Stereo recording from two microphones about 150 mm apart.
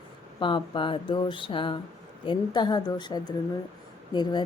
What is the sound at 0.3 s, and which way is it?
A woman's voice, 30° left (ahead or behind).